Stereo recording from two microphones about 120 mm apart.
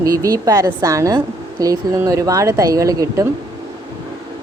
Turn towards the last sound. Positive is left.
turn(degrees=-30)  # may be behind; listen again after turning